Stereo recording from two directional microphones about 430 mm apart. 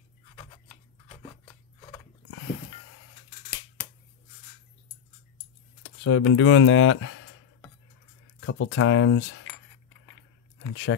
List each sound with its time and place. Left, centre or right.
6.0 s speech: left
8.4 s speech: left
10.7 s speech: left